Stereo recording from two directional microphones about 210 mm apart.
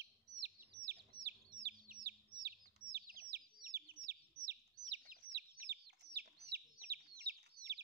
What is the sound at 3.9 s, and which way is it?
Chicken, 50° right (ahead or behind).